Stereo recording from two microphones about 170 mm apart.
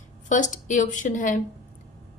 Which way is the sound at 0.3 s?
50° left (ahead or behind).